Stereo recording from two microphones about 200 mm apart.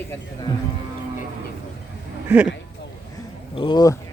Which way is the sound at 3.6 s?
20° left (ahead or behind).